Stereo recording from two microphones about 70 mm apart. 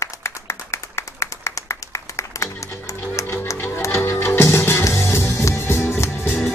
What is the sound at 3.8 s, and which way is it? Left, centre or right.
Music, left.